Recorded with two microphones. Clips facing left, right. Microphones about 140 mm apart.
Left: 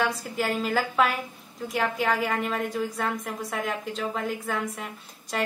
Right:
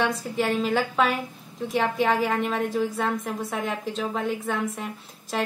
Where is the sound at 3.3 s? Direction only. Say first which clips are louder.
Right 2 dB; centre (ahead or behind).